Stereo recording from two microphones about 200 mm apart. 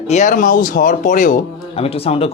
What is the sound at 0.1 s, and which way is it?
A man's voice, 40° left (ahead or behind).